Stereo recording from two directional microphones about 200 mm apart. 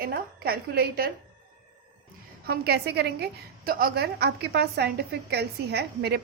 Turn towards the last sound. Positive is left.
turn(degrees=-55)  # may be behind; listen again after turning